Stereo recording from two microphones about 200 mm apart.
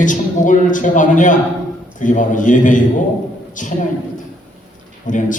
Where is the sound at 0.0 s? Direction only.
40° left (ahead or behind).